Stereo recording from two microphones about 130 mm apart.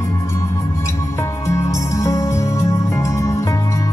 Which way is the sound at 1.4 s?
25° left (ahead or behind).